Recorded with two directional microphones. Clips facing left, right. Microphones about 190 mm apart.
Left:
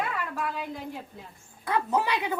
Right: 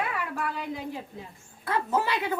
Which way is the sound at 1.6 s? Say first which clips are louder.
Left 1 dB; 15° left (ahead or behind).